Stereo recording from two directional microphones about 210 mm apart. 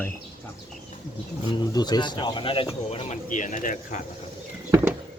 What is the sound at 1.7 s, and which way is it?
Speech, 20° left (ahead or behind).